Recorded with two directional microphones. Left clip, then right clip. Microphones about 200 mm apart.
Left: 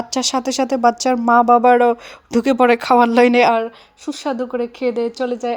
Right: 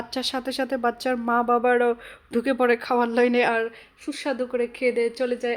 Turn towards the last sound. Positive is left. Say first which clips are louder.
# left 4 dB
turn(degrees=25)  # may be behind; listen again after turning